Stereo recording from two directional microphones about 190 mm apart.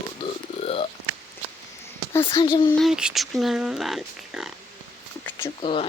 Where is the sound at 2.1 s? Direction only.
20° left (ahead or behind).